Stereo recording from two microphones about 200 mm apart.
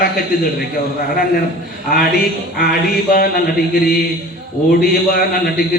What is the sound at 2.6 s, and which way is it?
A man's voice, 45° left (ahead or behind).